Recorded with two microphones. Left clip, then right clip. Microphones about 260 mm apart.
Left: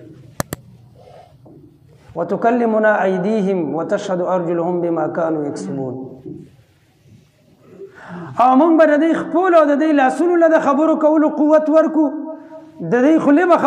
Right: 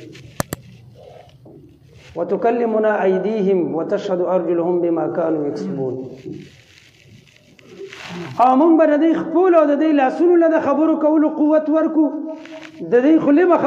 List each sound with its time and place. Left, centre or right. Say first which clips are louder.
0.4 s a sound: even; centre
2.1 s a man's voice: left 1 dB; left
8.4 s a man's voice: left 1 dB; left